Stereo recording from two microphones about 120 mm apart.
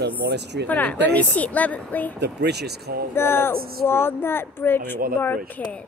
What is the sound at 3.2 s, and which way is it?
Speech, 20° left (ahead or behind).